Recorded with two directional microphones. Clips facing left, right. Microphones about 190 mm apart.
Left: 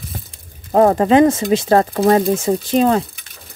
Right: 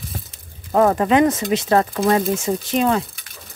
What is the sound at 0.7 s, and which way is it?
Speech, 30° left (ahead or behind).